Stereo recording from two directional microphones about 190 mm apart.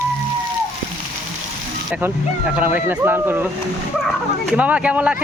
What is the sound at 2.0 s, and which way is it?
Speech, 5° right (ahead or behind).